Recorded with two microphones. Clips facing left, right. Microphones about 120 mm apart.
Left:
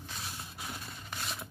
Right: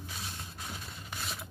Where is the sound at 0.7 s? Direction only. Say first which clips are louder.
Even; centre (ahead or behind).